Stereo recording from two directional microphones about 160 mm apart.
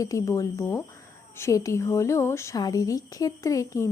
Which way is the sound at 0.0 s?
20° left (ahead or behind).